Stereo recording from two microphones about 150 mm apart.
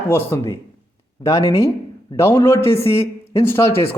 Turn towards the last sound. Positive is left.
turn(degrees=15)  # may be behind; listen again after turning